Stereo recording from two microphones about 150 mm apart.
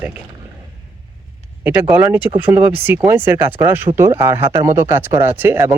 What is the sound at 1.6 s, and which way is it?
Speech, 10° right (ahead or behind).